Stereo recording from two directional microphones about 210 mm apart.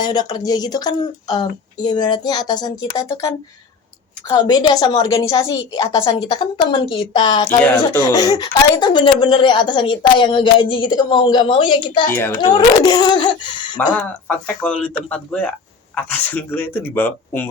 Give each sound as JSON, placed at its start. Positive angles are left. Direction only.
{"t": 0.0, "sound": "a woman's voice", "side_deg": 20}
{"t": 7.4, "sound": "speech", "side_deg": 10}
{"t": 13.9, "sound": "a woman's voice", "side_deg": 5}